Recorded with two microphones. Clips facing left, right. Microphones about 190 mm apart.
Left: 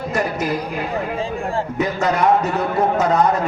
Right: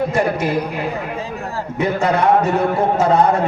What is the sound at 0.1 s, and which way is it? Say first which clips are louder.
Speech: right 3 dB; 30° right (ahead or behind).